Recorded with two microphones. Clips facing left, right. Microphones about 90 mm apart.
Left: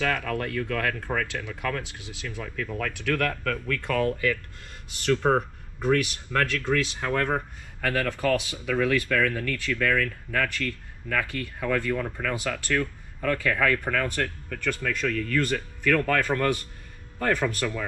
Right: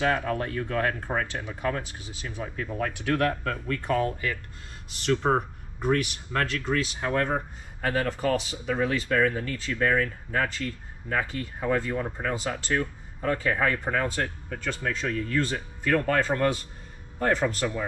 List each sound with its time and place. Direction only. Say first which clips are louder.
0.0 s speech: right 2 dB; 20° right (ahead or behind)
2.0 s speech: even; 80° left
2.2 s speech: even; 20° right (ahead or behind)